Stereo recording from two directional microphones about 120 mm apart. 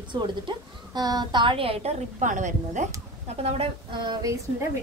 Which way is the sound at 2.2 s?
90° right.